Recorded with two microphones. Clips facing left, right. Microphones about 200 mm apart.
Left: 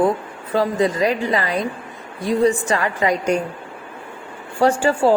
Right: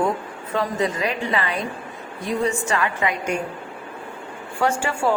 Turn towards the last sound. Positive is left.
turn(degrees=35)  # may be behind; listen again after turning